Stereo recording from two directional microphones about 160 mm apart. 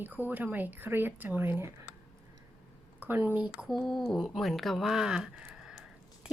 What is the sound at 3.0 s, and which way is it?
Speech, 10° right (ahead or behind).